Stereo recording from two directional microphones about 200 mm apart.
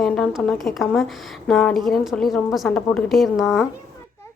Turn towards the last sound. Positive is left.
turn(degrees=0)  # may be behind; listen again after turning